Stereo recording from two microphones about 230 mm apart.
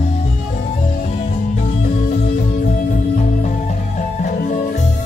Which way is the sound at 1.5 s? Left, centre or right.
Left.